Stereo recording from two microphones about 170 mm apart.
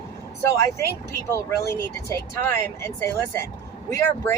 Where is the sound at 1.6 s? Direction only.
15° left (ahead or behind).